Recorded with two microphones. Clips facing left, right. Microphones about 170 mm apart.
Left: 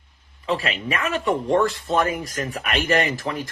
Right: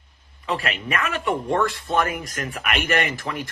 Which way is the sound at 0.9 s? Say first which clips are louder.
Left 2 dB; 35° left (ahead or behind).